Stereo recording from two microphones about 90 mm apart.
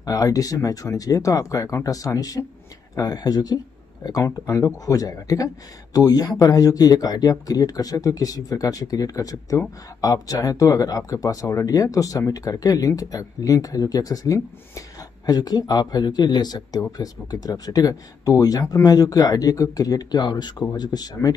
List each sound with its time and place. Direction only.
0.0 s speech: 40° left (ahead or behind)